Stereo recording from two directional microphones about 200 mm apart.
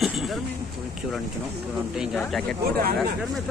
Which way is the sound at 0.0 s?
Centre (ahead or behind).